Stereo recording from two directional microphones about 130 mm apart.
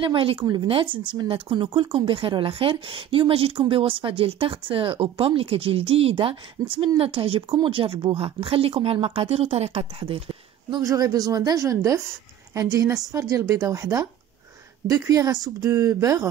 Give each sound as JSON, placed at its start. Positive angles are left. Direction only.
{"t": 0.0, "sound": "speech", "side_deg": -45}
{"t": 10.8, "sound": "a woman's voice", "side_deg": -25}